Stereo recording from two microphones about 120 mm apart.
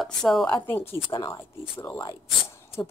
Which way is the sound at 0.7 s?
15° left (ahead or behind).